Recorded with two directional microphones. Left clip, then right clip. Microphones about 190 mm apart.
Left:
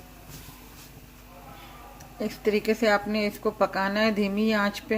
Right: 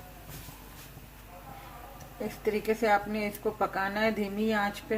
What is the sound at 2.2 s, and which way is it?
A woman's voice, 40° left (ahead or behind).